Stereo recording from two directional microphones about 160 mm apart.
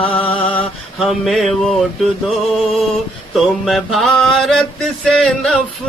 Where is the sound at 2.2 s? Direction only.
Centre (ahead or behind).